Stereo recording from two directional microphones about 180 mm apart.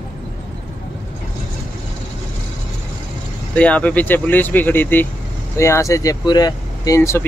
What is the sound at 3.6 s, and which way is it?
Speech, 5° left (ahead or behind).